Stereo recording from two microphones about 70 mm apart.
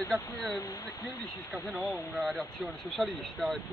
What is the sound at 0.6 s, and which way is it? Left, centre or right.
Speech, left.